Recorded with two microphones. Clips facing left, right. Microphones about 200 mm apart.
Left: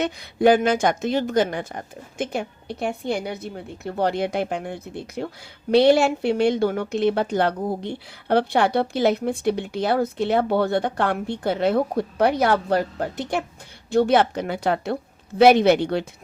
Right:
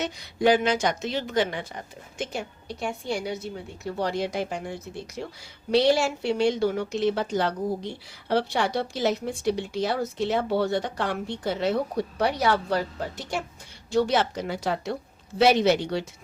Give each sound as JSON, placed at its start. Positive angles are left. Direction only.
{"t": 0.0, "sound": "a woman's voice", "side_deg": 55}